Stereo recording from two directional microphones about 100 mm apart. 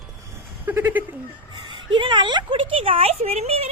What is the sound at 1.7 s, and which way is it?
Speech, 50° right (ahead or behind).